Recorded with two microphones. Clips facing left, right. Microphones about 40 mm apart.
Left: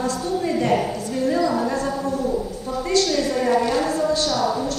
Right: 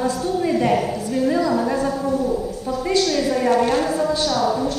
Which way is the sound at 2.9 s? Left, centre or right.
Centre.